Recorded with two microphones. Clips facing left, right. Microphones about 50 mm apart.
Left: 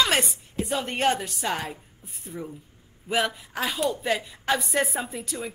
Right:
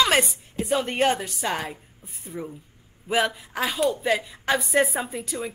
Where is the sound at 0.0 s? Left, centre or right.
Centre.